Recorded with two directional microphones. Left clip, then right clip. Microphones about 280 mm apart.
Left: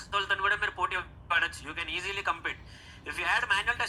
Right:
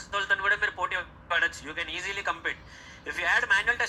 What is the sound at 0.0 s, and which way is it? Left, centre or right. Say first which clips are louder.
A man's voice: right 2 dB; centre.